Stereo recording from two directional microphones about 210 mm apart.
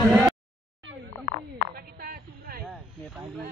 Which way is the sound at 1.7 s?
45° right (ahead or behind).